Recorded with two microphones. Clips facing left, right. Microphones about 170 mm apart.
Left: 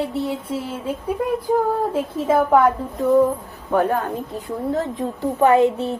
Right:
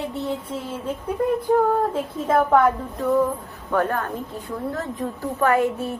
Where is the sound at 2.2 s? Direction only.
5° left (ahead or behind); by 6.0 s 25° left (ahead or behind).